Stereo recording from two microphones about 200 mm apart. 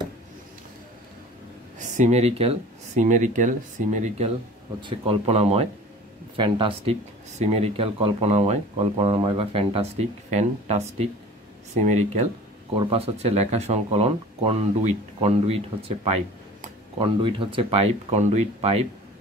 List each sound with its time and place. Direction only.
1.8 s speech: 35° right (ahead or behind)
17.0 s speech: 25° right (ahead or behind)